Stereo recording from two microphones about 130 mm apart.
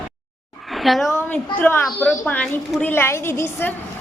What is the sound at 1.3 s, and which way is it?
A woman's voice, 15° left (ahead or behind).